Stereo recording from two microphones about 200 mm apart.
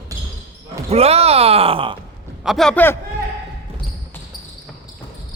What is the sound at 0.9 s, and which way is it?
Groan, 30° right (ahead or behind).